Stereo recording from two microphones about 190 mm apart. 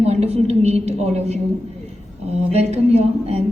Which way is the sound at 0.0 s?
35° right (ahead or behind).